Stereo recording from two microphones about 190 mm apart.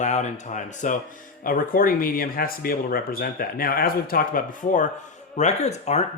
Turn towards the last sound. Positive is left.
turn(degrees=35)  # may be behind; listen again after turning